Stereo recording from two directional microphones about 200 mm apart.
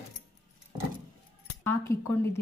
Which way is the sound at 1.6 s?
10° left (ahead or behind).